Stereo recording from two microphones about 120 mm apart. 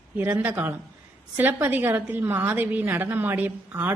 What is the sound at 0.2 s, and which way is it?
A woman's voice, 15° right (ahead or behind).